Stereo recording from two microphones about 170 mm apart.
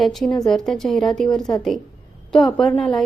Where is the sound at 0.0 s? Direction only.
Centre (ahead or behind).